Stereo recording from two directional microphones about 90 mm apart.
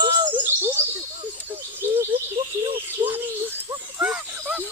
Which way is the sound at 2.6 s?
70° right (ahead or behind).